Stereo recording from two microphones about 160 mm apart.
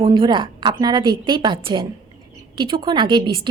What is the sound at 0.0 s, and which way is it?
A woman's voice, 30° right (ahead or behind).